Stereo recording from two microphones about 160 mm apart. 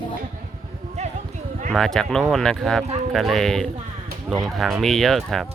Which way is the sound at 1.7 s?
5° left (ahead or behind).